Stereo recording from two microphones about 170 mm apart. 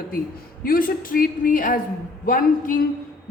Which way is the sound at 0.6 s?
55° left (ahead or behind).